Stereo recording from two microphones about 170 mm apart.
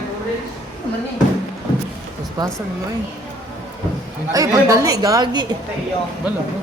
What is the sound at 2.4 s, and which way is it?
Speech, 25° right (ahead or behind).